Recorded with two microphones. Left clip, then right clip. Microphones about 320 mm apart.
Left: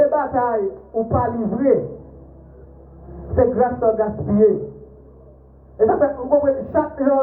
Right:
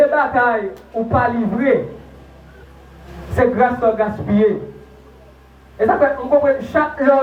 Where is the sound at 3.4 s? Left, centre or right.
Right.